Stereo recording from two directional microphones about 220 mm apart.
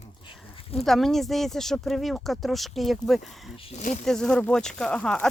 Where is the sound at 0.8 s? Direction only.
Centre (ahead or behind).